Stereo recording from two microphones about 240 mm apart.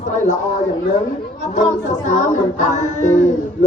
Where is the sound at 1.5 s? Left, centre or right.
Left.